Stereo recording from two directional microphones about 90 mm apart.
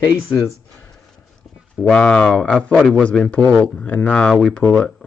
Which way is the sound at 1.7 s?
10° left (ahead or behind).